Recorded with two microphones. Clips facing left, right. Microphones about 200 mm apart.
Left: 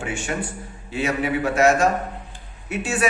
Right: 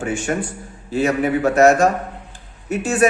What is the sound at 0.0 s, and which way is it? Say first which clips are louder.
Speech: right 5 dB; 40° right (ahead or behind).